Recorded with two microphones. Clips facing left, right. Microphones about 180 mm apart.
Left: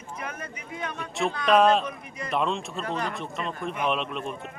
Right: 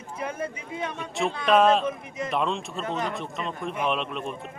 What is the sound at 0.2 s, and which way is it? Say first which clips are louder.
Speech: right 7 dB; 30° right (ahead or behind).